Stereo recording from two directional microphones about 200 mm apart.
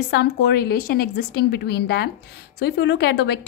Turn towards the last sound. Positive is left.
turn(degrees=55)  # may be behind; listen again after turning